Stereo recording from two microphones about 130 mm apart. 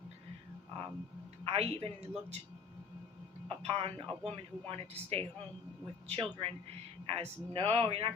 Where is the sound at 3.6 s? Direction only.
45° right (ahead or behind).